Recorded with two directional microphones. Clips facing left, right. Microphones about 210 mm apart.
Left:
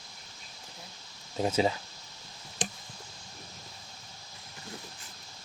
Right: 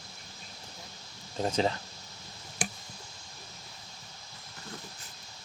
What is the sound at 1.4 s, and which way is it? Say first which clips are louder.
Speech: left 1 dB; 5° left (ahead or behind).